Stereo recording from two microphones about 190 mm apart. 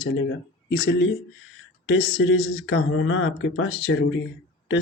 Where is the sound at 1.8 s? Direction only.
90° left.